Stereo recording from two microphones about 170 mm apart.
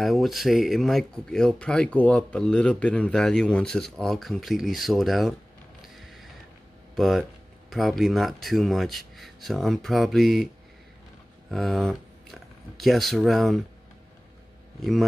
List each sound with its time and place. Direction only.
0.0 s speech: centre (ahead or behind)
5.8 s music: centre (ahead or behind)
7.0 s speech: centre (ahead or behind)
11.5 s speech: centre (ahead or behind)
14.8 s speech: centre (ahead or behind)